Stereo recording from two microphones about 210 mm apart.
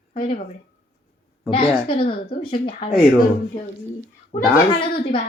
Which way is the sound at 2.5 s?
25° left (ahead or behind).